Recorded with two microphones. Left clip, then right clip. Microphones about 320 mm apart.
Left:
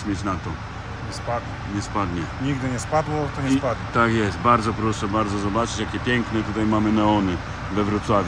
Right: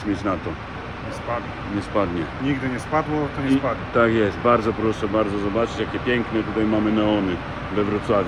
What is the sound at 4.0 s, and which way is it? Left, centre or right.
A man's voice, centre.